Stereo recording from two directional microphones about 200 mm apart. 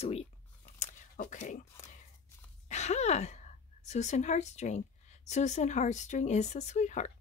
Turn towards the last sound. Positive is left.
turn(degrees=35)  # may be behind; listen again after turning